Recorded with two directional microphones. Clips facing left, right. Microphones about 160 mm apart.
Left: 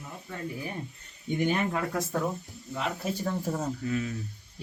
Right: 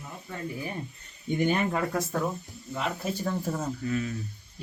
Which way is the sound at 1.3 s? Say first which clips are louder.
Right 1 dB; 40° right (ahead or behind).